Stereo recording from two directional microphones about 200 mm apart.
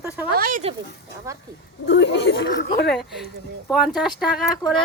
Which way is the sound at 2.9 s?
Centre (ahead or behind).